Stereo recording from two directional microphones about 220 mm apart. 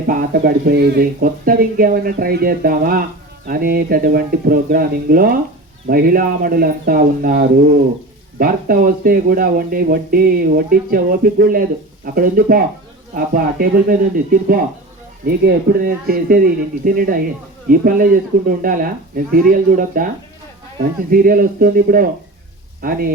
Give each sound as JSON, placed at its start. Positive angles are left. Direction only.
{"t": 0.1, "sound": "speech", "side_deg": -40}
{"t": 15.3, "sound": "speech", "side_deg": -45}
{"t": 21.1, "sound": "speech", "side_deg": -40}